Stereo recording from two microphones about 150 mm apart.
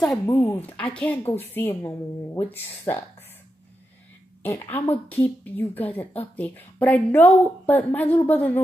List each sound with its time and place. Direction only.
0.3 s speech: 20° left (ahead or behind)
4.4 s a woman's voice: 10° left (ahead or behind)